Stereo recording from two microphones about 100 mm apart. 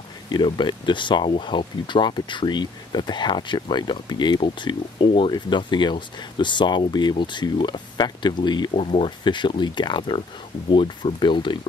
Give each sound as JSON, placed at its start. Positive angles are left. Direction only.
{"t": 0.3, "sound": "speech", "side_deg": 50}
{"t": 8.7, "sound": "speech", "side_deg": 75}
{"t": 9.2, "sound": "speech", "side_deg": 50}